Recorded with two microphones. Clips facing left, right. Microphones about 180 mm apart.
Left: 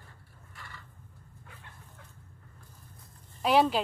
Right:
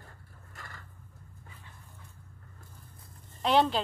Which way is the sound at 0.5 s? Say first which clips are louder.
Right 1 dB; 45° right (ahead or behind).